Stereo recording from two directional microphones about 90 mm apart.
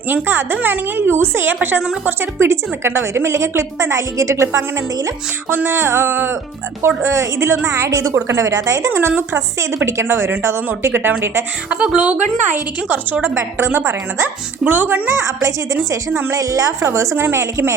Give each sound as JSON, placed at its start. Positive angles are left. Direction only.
{"t": 0.1, "sound": "a woman's voice", "side_deg": -25}
{"t": 9.0, "sound": "a woman's voice", "side_deg": -25}
{"t": 11.7, "sound": "a woman's voice", "side_deg": -10}
{"t": 15.1, "sound": "a woman's voice", "side_deg": -35}